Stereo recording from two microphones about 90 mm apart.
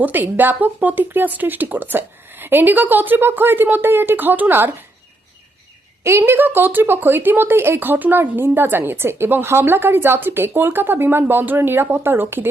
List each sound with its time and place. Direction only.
0.0 s speech: 20° right (ahead or behind)
6.0 s speech: 30° right (ahead or behind)